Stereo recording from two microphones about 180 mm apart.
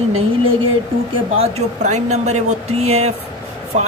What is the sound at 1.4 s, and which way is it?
Speech, 40° right (ahead or behind).